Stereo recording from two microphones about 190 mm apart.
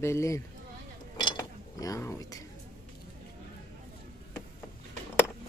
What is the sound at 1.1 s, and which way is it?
Cutlery, 20° left (ahead or behind).